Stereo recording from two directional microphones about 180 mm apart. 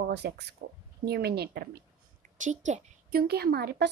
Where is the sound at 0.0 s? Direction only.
70° right (ahead or behind).